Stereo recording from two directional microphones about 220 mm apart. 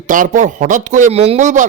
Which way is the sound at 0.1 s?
35° right (ahead or behind).